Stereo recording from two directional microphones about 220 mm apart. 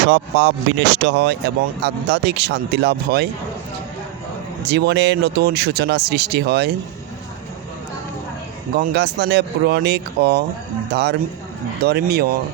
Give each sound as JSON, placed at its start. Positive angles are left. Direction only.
{"t": 0.0, "sound": "speech", "side_deg": -55}
{"t": 4.6, "sound": "speech", "side_deg": -45}
{"t": 8.7, "sound": "speech", "side_deg": -45}